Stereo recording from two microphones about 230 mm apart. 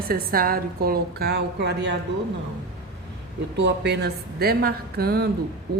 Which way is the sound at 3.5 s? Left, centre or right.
Right.